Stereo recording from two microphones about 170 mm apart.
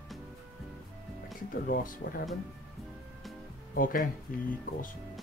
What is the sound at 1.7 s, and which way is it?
Speech, 60° left (ahead or behind).